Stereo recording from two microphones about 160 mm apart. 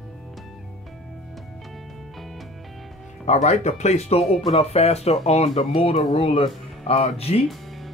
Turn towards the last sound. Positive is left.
turn(degrees=40)  # may be behind; listen again after turning